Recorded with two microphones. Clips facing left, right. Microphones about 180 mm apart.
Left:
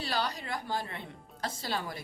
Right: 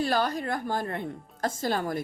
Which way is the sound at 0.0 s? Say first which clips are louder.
Right 8 dB; 50° right (ahead or behind).